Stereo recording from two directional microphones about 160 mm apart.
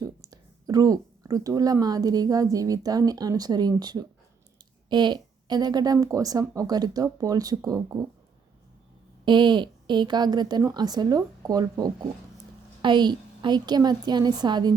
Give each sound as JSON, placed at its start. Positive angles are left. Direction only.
{"t": 0.0, "sound": "speech", "side_deg": -25}
{"t": 9.2, "sound": "speech", "side_deg": -30}